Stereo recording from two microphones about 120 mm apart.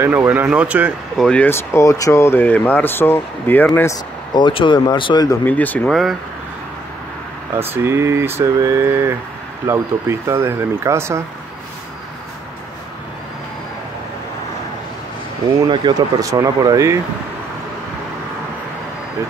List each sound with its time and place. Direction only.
0.0 s speech: 20° right (ahead or behind)
1.1 s speech: 5° left (ahead or behind)
1.4 s speech: 20° left (ahead or behind)
4.3 s speech: 40° left (ahead or behind)
5.4 s speech: 15° left (ahead or behind)
5.9 s speech: centre (ahead or behind)
7.5 s speech: 20° right (ahead or behind)
15.7 s speech: 40° right (ahead or behind)